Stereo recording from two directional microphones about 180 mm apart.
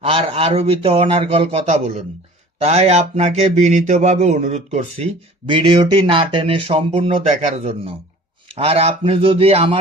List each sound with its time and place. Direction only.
0.0 s speech: 35° right (ahead or behind)